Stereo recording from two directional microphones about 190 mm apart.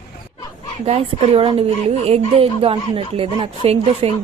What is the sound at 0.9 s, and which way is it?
A woman's voice, 30° right (ahead or behind).